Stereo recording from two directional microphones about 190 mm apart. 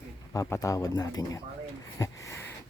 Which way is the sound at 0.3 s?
15° left (ahead or behind).